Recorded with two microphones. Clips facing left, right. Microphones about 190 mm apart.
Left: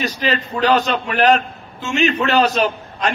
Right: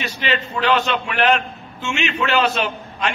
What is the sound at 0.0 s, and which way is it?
A man's voice, 40° left (ahead or behind).